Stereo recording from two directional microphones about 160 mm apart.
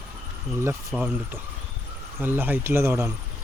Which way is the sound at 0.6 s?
15° right (ahead or behind).